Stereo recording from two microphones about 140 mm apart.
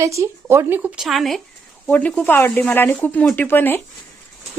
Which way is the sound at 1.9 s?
10° left (ahead or behind).